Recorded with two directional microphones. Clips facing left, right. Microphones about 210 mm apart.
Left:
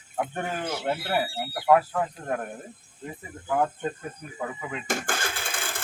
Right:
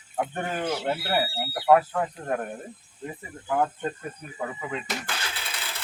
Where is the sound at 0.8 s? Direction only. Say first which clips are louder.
Even; 5° right (ahead or behind).